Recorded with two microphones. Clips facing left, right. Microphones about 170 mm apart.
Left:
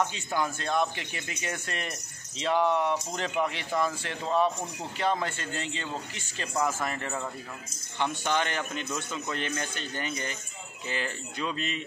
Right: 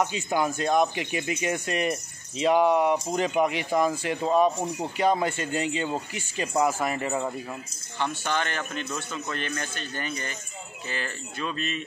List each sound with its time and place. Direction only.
0.0 s speech: 15° right (ahead or behind)
8.0 s a man's voice: 15° left (ahead or behind)